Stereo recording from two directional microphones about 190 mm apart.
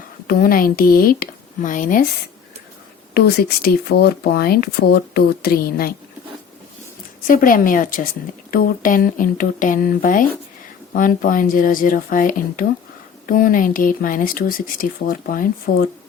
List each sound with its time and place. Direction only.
0.3 s speech: 50° left (ahead or behind)
3.2 s speech: 55° left (ahead or behind)
7.3 s speech: 45° left (ahead or behind)